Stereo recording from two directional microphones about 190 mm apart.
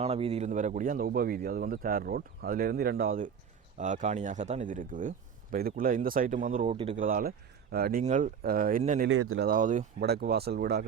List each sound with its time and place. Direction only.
0.0 s speech: 35° right (ahead or behind)
6.7 s speech: 30° right (ahead or behind)
6.9 s speech: 45° right (ahead or behind)
9.0 s speech: 90° right
9.5 s speech: 40° right (ahead or behind)
10.0 s speech: 55° right (ahead or behind)